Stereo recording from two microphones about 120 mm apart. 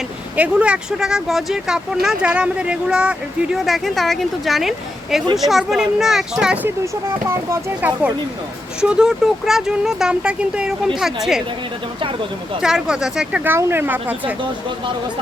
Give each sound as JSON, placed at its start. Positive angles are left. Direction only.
{"t": 0.3, "sound": "speech", "side_deg": -10}
{"t": 12.6, "sound": "speech", "side_deg": -5}
{"t": 13.4, "sound": "speech", "side_deg": -20}